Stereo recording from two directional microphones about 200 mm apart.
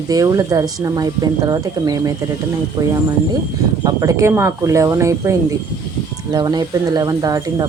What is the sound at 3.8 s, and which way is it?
Speech, 15° right (ahead or behind).